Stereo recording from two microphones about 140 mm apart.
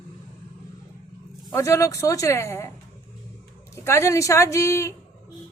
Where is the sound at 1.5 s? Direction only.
20° left (ahead or behind).